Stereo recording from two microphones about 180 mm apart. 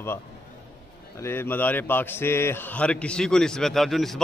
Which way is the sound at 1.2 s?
10° left (ahead or behind).